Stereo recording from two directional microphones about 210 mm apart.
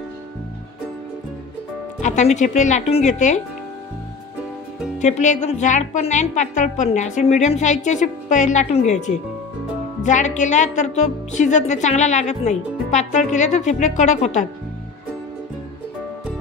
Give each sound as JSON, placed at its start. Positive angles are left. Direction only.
{"t": 2.0, "sound": "a woman's voice", "side_deg": 35}
{"t": 4.9, "sound": "a woman's voice", "side_deg": 35}